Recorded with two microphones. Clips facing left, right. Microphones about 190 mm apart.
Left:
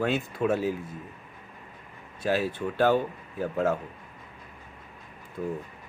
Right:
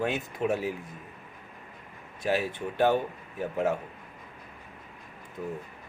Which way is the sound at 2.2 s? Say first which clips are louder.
Left 2 dB; 15° right (ahead or behind).